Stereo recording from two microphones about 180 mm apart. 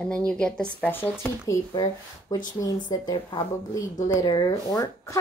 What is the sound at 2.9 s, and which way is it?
A woman's voice, 20° left (ahead or behind).